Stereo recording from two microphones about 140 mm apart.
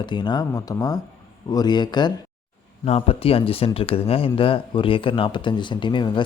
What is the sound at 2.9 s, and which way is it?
A man's voice, 45° left (ahead or behind).